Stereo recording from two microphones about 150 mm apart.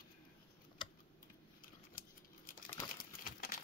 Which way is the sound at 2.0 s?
70° left (ahead or behind).